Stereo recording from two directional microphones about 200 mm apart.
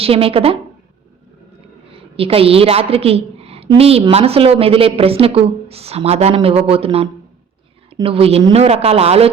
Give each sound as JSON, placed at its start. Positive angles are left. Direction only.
{"t": 0.0, "sound": "a woman's voice", "side_deg": -30}
{"t": 1.9, "sound": "a woman's voice", "side_deg": -30}